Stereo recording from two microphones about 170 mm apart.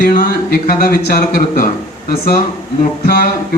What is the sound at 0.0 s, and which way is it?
Speech, 60° left (ahead or behind).